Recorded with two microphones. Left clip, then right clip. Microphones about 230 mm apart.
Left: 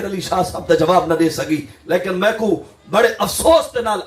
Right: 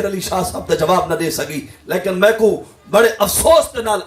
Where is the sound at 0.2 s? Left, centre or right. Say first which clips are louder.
Left 1 dB; right.